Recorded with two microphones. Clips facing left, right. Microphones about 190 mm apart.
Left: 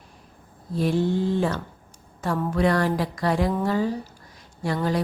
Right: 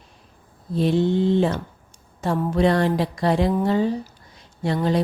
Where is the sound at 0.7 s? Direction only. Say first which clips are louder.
Right 3 dB; 25° right (ahead or behind).